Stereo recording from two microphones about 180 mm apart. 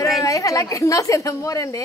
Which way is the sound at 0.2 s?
20° left (ahead or behind).